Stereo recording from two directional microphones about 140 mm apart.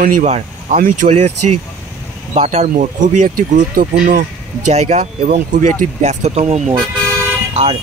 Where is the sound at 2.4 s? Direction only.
65° right (ahead or behind).